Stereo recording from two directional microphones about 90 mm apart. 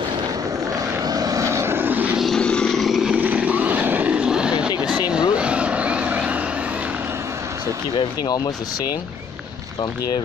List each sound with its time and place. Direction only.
1.0 s vehicle: 45° right (ahead or behind); by 2.1 s 20° right (ahead or behind)
2.1 s vehicle: 5° left (ahead or behind)
3.1 s vehicle: 15° right (ahead or behind)